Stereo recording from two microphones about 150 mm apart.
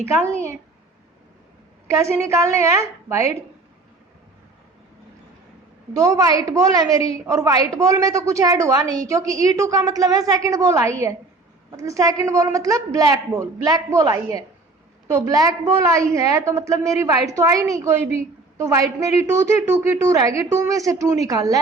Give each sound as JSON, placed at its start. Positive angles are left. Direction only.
{"t": 1.9, "sound": "a woman's voice", "side_deg": -20}
{"t": 6.0, "sound": "a woman's voice", "side_deg": -20}